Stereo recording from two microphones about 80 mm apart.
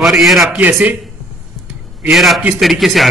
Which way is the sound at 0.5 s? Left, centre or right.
Right.